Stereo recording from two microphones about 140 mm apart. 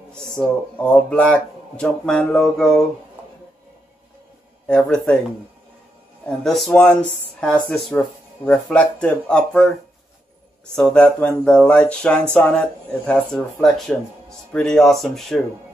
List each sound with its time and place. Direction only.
0.1 s speech: 5° left (ahead or behind)
4.6 s speech: 5° left (ahead or behind)
6.2 s speech: centre (ahead or behind)
10.7 s speech: 5° left (ahead or behind)